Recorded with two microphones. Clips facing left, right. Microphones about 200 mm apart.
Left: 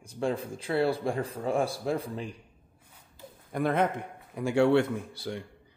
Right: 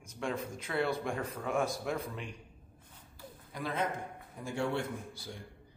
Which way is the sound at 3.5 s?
60° left (ahead or behind).